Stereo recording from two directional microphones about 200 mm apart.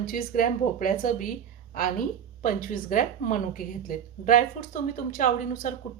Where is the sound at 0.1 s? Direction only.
45° left (ahead or behind).